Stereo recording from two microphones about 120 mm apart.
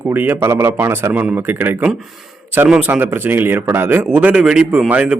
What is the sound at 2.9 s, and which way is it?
A man's voice, 15° right (ahead or behind).